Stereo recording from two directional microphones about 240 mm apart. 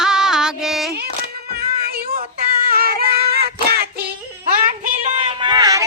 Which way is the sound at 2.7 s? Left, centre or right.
Right.